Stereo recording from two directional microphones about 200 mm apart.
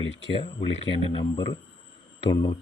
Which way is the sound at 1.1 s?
25° left (ahead or behind).